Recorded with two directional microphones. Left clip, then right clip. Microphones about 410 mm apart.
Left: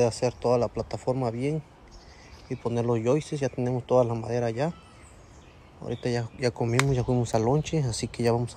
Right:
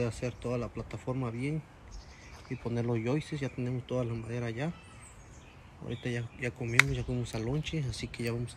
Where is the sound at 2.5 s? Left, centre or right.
Centre.